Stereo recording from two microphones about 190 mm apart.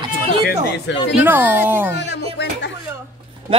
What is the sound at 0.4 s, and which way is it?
Speech, 60° left (ahead or behind).